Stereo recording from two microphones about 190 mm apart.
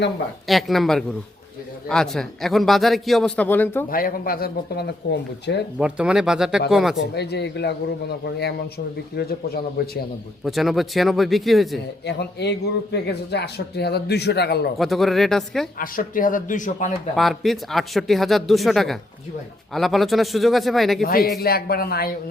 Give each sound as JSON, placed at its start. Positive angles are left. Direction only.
{"t": 0.4, "sound": "a man's voice", "side_deg": 0}
{"t": 3.8, "sound": "speech", "side_deg": 50}
{"t": 5.8, "sound": "a man's voice", "side_deg": -5}
{"t": 6.9, "sound": "speech", "side_deg": 70}
{"t": 10.4, "sound": "a man's voice", "side_deg": 0}
{"t": 12.0, "sound": "speech", "side_deg": 60}
{"t": 14.8, "sound": "a man's voice", "side_deg": 0}
{"t": 15.8, "sound": "speech", "side_deg": 45}
{"t": 17.2, "sound": "a man's voice", "side_deg": 0}
{"t": 21.0, "sound": "speech", "side_deg": 50}